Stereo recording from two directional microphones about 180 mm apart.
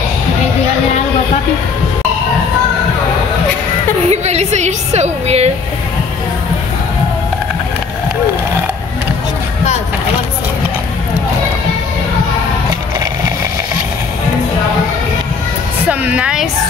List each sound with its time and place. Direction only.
4.1 s a woman's voice: 35° right (ahead or behind)
15.9 s a woman's voice: 5° right (ahead or behind)